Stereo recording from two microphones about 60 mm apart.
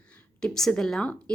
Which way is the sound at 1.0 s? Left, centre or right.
Left.